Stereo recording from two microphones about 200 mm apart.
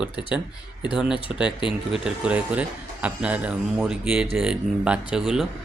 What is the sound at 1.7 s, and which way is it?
A man's voice, 5° right (ahead or behind).